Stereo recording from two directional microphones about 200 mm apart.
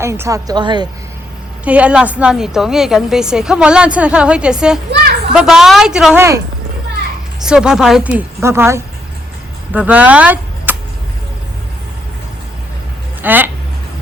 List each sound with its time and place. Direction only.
0.0 s a woman's voice: 15° right (ahead or behind)
1.6 s a woman's voice: 5° right (ahead or behind)
7.4 s a woman's voice: 5° right (ahead or behind)
13.2 s a woman's voice: 10° right (ahead or behind)